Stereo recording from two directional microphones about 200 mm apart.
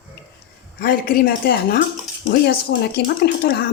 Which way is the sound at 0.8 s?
45° left (ahead or behind).